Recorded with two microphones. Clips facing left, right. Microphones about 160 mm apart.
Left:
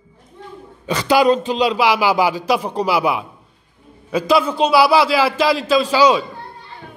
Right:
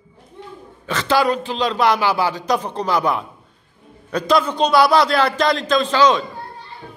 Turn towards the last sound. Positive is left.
turn(degrees=10)  # may be behind; listen again after turning